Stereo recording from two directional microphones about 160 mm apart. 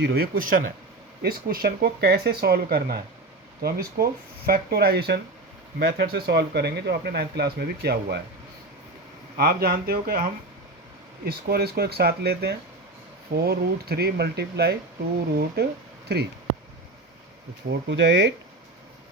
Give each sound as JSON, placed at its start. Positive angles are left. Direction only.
{"t": 0.0, "sound": "speech", "side_deg": -75}
{"t": 6.0, "sound": "speech", "side_deg": -80}
{"t": 9.4, "sound": "speech", "side_deg": -70}
{"t": 11.3, "sound": "speech", "side_deg": -80}
{"t": 13.3, "sound": "speech", "side_deg": -80}
{"t": 17.7, "sound": "speech", "side_deg": -90}